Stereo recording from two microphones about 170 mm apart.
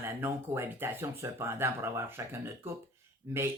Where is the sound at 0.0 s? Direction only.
10° right (ahead or behind).